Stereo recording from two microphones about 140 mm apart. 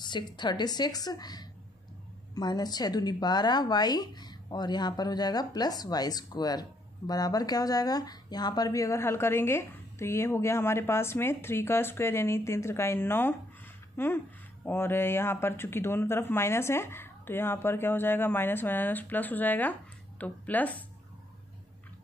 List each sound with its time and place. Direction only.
0.0 s speech: 30° left (ahead or behind); by 20.7 s 10° left (ahead or behind)